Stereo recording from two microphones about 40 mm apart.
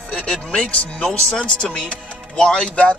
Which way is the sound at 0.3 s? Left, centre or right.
Left.